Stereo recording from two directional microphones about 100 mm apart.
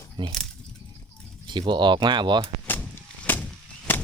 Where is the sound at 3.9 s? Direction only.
20° left (ahead or behind).